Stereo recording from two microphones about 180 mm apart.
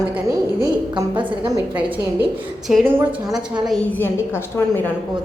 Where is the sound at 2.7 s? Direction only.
5° right (ahead or behind).